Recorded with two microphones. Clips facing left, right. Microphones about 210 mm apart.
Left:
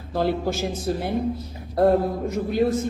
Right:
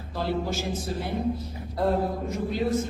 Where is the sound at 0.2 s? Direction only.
60° left (ahead or behind).